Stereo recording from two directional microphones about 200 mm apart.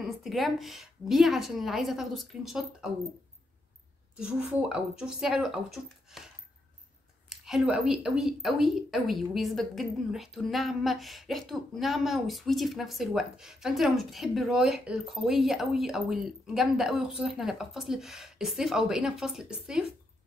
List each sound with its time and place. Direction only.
0.2 s a woman's voice: centre (ahead or behind)
4.2 s a woman's voice: 5° right (ahead or behind)
7.2 s a woman's voice: centre (ahead or behind)